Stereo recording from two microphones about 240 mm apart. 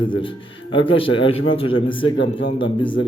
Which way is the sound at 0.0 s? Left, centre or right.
Left.